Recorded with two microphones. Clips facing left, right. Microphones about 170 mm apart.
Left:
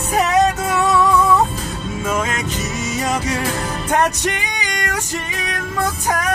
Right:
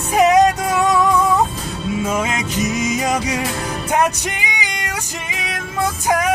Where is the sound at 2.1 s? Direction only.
10° right (ahead or behind).